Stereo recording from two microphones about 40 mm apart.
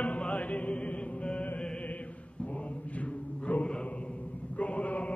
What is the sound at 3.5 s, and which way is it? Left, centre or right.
Chant, left.